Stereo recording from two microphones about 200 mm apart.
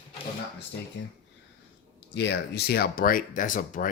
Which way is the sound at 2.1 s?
60° left (ahead or behind).